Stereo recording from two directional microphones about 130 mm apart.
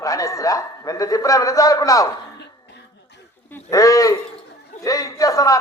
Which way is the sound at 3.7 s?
25° left (ahead or behind).